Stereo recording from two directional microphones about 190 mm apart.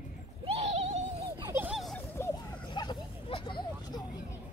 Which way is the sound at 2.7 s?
25° left (ahead or behind).